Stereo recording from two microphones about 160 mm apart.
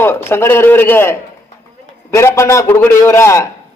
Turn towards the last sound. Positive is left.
turn(degrees=15)  # may be behind; listen again after turning